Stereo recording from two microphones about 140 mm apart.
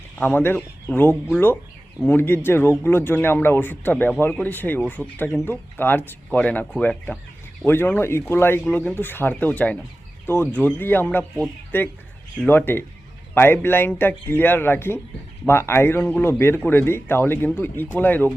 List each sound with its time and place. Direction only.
0.2 s a man's voice: 15° left (ahead or behind)